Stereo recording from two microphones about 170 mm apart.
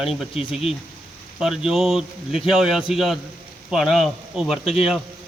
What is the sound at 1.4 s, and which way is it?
A man's voice, centre (ahead or behind).